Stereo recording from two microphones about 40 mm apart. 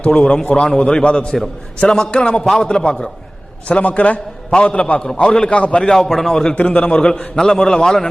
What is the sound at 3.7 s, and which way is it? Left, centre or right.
Speech, left.